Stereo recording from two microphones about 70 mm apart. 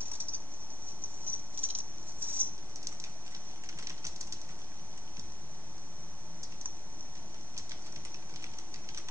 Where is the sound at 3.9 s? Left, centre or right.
Right.